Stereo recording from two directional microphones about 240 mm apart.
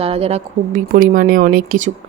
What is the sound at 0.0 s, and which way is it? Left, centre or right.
A woman's voice, right.